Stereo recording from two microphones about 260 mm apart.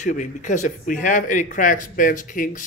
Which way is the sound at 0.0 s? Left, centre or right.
Left.